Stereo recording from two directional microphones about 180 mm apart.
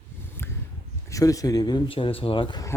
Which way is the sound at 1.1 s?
20° left (ahead or behind).